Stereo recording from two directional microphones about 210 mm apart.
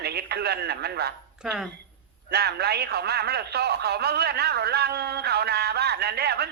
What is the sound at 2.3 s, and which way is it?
Speech, 50° right (ahead or behind).